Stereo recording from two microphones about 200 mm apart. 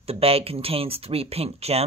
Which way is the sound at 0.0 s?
30° right (ahead or behind).